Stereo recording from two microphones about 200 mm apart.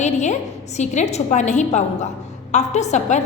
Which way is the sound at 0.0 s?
35° left (ahead or behind).